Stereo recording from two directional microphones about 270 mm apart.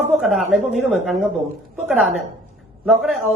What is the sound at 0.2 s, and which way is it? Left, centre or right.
A woman's voice, centre.